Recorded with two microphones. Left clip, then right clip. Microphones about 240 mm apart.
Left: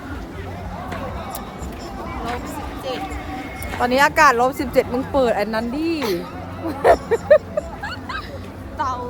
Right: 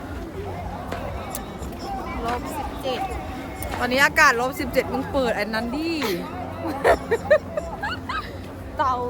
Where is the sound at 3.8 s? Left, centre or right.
Centre.